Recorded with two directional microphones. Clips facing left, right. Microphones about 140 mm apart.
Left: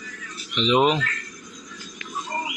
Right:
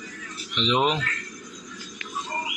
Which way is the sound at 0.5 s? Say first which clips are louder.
Left 4 dB; 5° left (ahead or behind).